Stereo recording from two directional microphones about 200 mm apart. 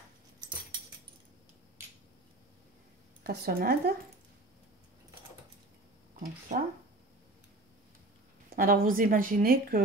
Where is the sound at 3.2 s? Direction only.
50° right (ahead or behind).